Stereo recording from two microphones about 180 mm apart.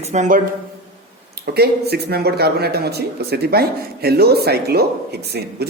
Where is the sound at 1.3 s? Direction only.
60° right (ahead or behind).